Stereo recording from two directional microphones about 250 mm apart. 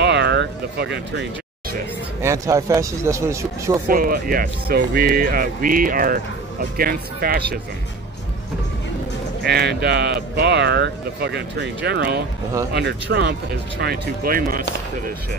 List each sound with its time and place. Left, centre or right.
0.0 s a sound: right
2.2 s speech: centre
3.8 s a man's voice: right
9.5 s a man's voice: right